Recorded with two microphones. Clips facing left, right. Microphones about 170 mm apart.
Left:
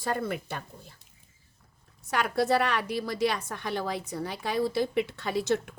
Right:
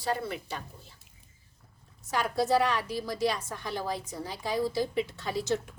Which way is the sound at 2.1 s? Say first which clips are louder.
Left 1 dB; 65° left (ahead or behind).